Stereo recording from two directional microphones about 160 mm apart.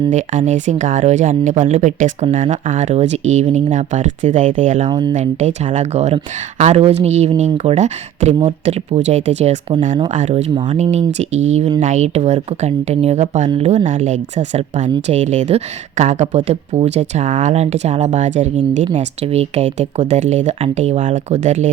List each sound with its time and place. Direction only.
0.1 s speech: 50° right (ahead or behind)
4.9 s speech: 25° right (ahead or behind)
5.1 s speech: 45° right (ahead or behind)